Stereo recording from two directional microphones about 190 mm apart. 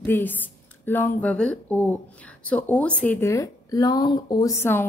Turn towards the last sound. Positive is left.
turn(degrees=10)  # may be behind; listen again after turning